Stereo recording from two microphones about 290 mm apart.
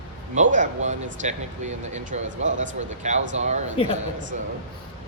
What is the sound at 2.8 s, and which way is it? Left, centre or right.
Speech, right.